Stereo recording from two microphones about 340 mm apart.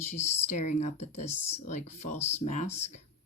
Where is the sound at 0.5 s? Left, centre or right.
Left.